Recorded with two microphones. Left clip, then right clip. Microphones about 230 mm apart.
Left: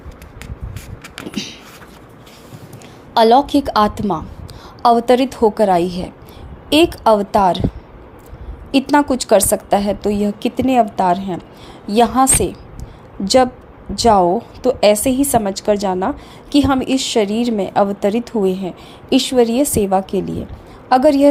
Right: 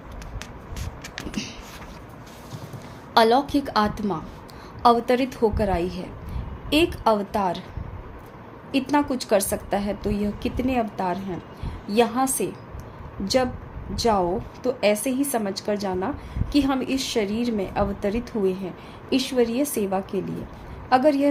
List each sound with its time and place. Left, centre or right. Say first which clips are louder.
3.2 s a woman's voice: left 7 dB; left
8.7 s a woman's voice: left 9 dB; left